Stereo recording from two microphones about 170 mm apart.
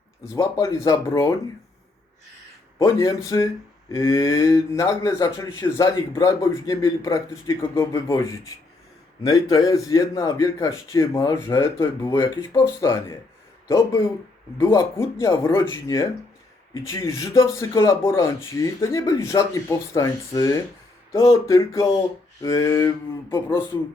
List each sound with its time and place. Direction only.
0.3 s a man's voice: 20° left (ahead or behind)
2.7 s a man's voice: 20° left (ahead or behind)